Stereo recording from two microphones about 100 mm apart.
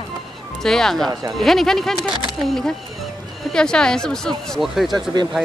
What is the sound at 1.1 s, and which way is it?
Speech, 40° right (ahead or behind).